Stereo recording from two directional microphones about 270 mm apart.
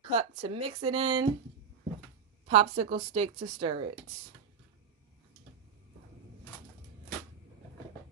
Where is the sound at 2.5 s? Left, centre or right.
Right.